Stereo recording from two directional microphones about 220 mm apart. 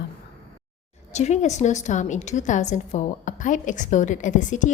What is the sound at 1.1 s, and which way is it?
A woman's voice, 30° left (ahead or behind).